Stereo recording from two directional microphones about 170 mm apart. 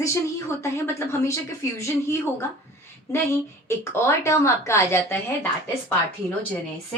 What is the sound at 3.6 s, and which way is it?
Speech, 15° left (ahead or behind).